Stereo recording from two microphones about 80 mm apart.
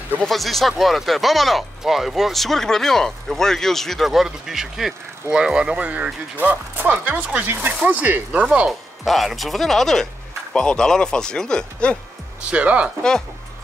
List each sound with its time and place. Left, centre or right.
0.2 s speech: centre
9.0 s speech: centre
12.4 s speech: centre